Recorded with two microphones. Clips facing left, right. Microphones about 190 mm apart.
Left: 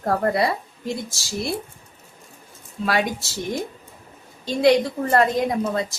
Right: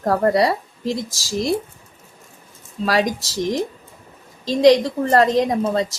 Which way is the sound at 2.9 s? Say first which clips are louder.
Right 4 dB; 90° right.